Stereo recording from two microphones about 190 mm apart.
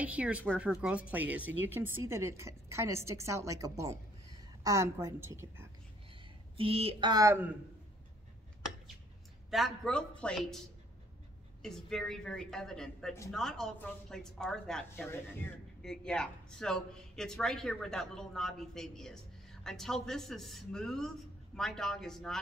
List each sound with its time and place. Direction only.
0.0 s speech: 5° right (ahead or behind)
6.5 s speech: 30° right (ahead or behind); by 7.5 s 15° right (ahead or behind)
9.5 s speech: centre (ahead or behind)
11.6 s speech: centre (ahead or behind)